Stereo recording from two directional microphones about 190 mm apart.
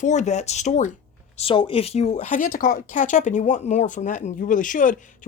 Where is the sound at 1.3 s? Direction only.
30° left (ahead or behind); by 4.9 s 45° left (ahead or behind).